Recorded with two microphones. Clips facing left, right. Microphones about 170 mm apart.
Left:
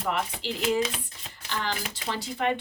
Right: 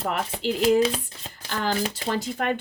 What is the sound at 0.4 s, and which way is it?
Speech, 45° right (ahead or behind).